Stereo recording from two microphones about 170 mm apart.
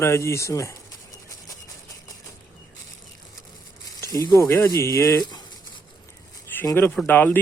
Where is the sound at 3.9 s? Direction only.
20° left (ahead or behind).